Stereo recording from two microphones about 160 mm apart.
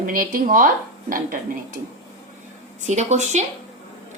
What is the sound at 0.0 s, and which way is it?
Speech, 60° right (ahead or behind).